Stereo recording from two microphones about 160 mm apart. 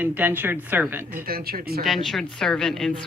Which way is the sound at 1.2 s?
70° right (ahead or behind).